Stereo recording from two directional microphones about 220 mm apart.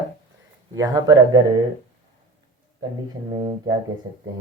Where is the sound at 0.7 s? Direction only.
15° right (ahead or behind).